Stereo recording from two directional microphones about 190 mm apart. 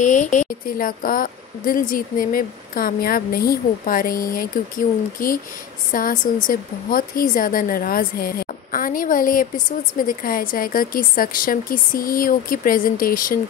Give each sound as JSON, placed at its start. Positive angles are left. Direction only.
{"t": 0.0, "sound": "a woman's voice", "side_deg": 40}